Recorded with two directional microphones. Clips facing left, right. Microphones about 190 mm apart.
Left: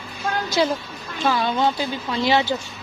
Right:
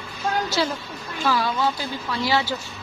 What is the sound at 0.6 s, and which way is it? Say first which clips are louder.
A woman's voice: left 4 dB; 20° left (ahead or behind).